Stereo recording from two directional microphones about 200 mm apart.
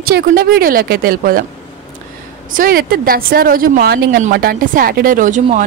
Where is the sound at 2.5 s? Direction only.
45° right (ahead or behind).